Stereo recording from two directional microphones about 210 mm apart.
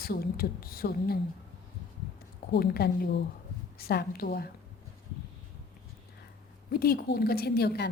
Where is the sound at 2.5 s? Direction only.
50° left (ahead or behind).